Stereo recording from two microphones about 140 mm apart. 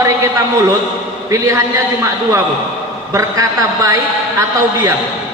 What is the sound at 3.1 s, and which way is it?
A man's voice, 25° right (ahead or behind).